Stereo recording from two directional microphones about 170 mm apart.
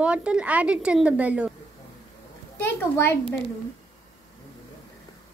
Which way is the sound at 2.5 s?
15° left (ahead or behind).